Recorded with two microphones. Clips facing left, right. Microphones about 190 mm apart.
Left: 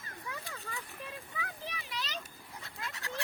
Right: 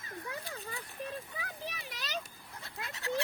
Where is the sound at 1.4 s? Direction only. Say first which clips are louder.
Even; 40° right (ahead or behind).